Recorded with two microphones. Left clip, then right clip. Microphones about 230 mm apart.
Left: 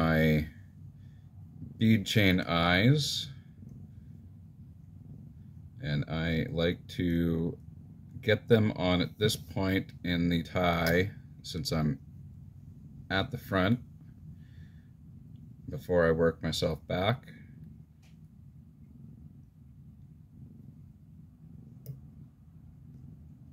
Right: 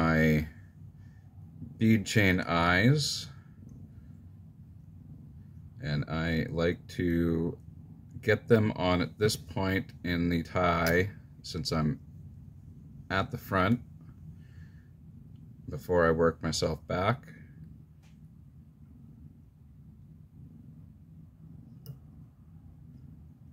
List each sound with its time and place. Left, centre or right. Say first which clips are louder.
0.0 s a sound: right 1 dB; centre
1.8 s speech: right 1 dB; centre
5.8 s speech: right 1 dB; centre
13.1 s speech: right 1 dB; centre
15.7 s speech: right 1 dB; centre